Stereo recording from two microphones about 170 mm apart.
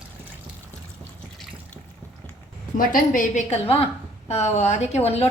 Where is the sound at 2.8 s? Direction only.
50° left (ahead or behind).